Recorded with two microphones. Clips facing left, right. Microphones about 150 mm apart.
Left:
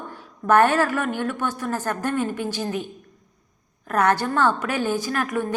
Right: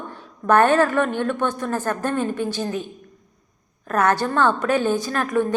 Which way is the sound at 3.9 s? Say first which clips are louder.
Right 1 dB; 15° left (ahead or behind).